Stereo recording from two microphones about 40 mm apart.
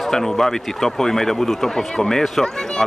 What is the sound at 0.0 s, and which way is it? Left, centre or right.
A man's voice, centre.